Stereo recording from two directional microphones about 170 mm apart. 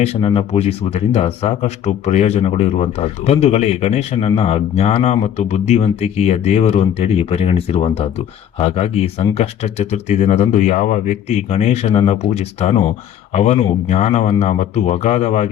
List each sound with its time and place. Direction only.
0.0 s speech: 35° left (ahead or behind)